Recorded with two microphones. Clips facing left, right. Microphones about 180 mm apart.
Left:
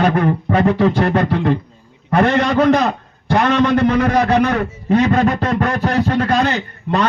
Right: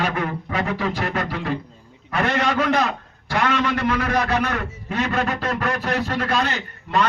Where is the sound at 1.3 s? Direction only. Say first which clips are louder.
Left 9 dB; 60° left (ahead or behind).